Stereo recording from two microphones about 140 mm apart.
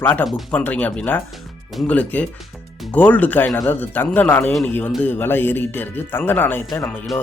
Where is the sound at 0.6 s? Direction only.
10° left (ahead or behind).